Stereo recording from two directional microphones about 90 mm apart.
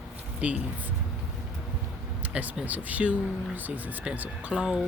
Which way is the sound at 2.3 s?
15° right (ahead or behind).